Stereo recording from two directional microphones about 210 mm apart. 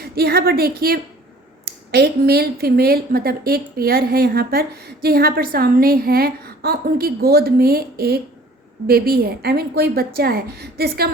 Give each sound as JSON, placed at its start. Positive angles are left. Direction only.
{"t": 0.0, "sound": "a woman's voice", "side_deg": -50}